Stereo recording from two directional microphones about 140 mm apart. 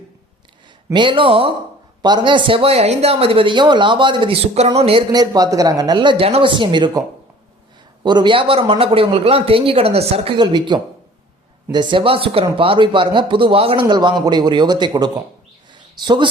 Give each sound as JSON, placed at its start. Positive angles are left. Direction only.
{"t": 0.9, "sound": "speech", "side_deg": -35}
{"t": 5.1, "sound": "speech", "side_deg": -30}
{"t": 8.0, "sound": "a man's voice", "side_deg": -35}
{"t": 10.3, "sound": "speech", "side_deg": -30}